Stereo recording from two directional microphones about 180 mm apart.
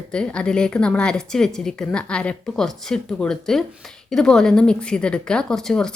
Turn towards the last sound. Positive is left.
turn(degrees=5)  # may be behind; listen again after turning